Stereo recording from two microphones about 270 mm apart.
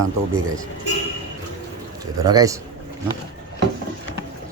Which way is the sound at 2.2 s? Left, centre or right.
Centre.